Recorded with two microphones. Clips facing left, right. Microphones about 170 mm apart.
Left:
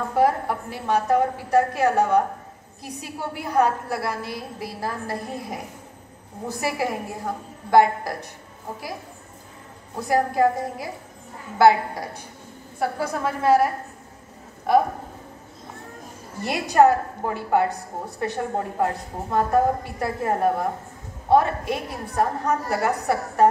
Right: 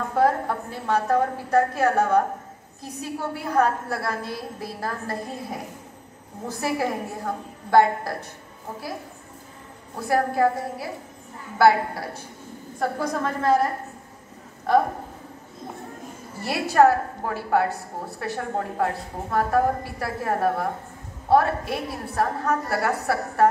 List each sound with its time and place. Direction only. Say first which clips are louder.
0.1 s a woman's voice: even; 10° left (ahead or behind)
9.9 s a woman's voice: left 1 dB; 15° left (ahead or behind)
14.7 s speech: left 1 dB; 10° left (ahead or behind)
16.4 s a woman's voice: left 1 dB; 20° left (ahead or behind)